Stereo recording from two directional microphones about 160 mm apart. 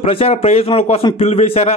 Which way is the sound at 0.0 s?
40° left (ahead or behind).